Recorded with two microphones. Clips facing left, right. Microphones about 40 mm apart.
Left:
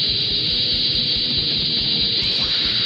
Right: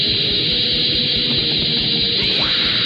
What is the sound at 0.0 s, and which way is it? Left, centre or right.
Music, right.